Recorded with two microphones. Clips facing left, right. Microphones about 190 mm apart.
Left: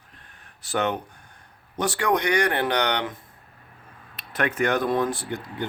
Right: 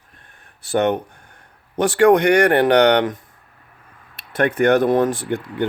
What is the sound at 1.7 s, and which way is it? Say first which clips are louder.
Speech: right 10 dB; 50° right (ahead or behind).